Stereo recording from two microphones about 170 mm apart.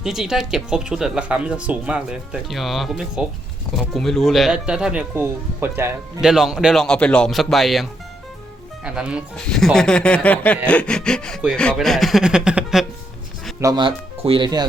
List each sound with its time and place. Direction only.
0.0 s speech: 5° right (ahead or behind)
6.2 s speech: centre (ahead or behind)
13.6 s speech: 25° right (ahead or behind)